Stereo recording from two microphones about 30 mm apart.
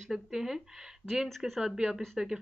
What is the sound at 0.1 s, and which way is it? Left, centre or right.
Speech, centre.